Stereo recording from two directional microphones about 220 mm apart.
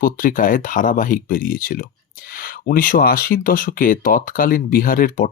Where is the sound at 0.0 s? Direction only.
40° left (ahead or behind).